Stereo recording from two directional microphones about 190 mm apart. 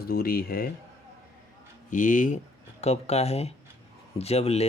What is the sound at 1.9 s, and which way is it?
Speech, 45° left (ahead or behind).